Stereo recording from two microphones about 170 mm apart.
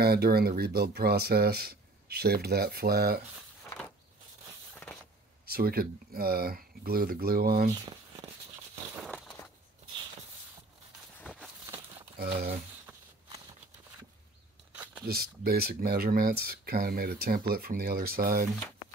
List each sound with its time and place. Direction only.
0.0 s speech: 65° right (ahead or behind)
5.4 s speech: 65° right (ahead or behind)
11.1 s a sound: 10° left (ahead or behind)
12.2 s speech: 65° right (ahead or behind)
14.7 s a sound: 10° right (ahead or behind)
15.0 s speech: 60° right (ahead or behind)